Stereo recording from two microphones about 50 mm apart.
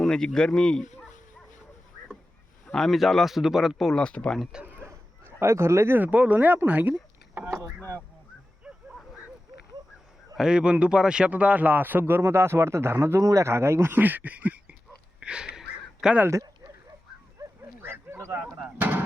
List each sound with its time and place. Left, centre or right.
0.0 s speech: centre
2.7 s speech: centre
3.8 s speech: centre
4.0 s speech: left
4.6 s a sound: right
5.2 s speech: right
6.0 s speech: right
10.3 s speech: centre
11.3 s speech: right
12.2 s speech: right
14.0 s a sound: right
15.2 s a sound: centre
18.8 s a sound: right